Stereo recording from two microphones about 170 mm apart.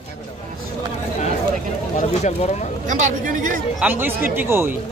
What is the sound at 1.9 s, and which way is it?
Speech, 45° left (ahead or behind).